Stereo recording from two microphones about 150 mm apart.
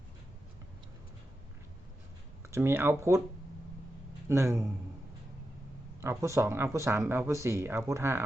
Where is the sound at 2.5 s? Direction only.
15° right (ahead or behind).